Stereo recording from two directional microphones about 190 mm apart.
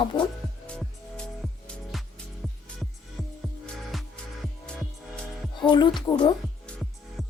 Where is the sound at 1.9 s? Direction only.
Centre (ahead or behind).